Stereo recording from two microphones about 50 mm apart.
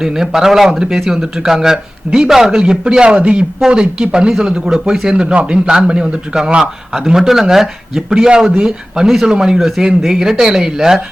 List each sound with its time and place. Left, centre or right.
0.0 s speech: centre